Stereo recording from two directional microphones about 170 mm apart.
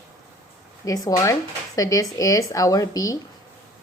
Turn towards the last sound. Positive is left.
turn(degrees=20)  # may be behind; listen again after turning